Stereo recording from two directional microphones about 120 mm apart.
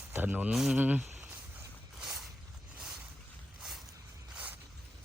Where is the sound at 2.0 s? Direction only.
5° right (ahead or behind).